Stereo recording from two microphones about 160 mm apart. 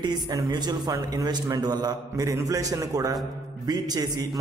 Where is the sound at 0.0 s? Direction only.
25° right (ahead or behind).